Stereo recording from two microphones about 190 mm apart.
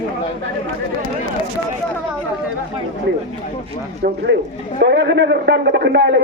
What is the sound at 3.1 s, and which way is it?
Speech, 75° right (ahead or behind).